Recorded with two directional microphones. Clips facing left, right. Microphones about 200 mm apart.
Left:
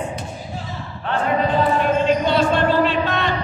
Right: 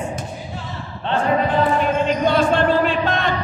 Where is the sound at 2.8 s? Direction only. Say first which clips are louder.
Even; 50° right (ahead or behind).